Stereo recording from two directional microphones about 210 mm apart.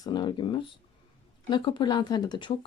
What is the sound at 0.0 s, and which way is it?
Speech, 20° left (ahead or behind).